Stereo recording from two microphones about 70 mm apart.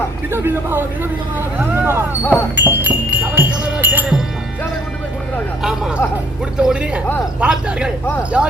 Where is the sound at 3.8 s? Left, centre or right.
Right.